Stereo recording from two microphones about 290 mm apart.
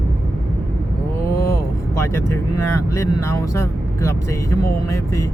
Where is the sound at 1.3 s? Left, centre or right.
Left.